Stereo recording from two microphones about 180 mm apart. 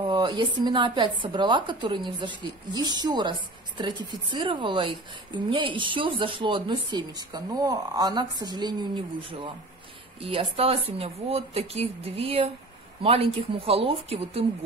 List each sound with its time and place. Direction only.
0.0 s a woman's voice: 25° right (ahead or behind)